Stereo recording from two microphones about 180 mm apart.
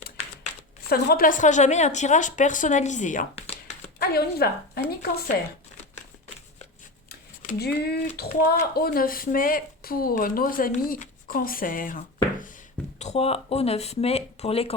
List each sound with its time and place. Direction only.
0.9 s speech: 55° left (ahead or behind); by 3.5 s 40° left (ahead or behind)
4.0 s a woman's voice: 60° left (ahead or behind)
7.1 s a sound: 60° left (ahead or behind)
8.1 s a woman's voice: 60° left (ahead or behind)
13.0 s speech: 35° left (ahead or behind)